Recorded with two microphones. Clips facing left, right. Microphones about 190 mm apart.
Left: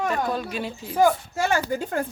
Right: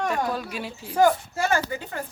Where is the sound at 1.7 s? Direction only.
45° left (ahead or behind).